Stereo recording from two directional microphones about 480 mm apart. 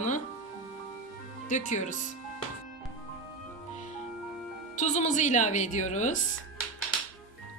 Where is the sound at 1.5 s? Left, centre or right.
Centre.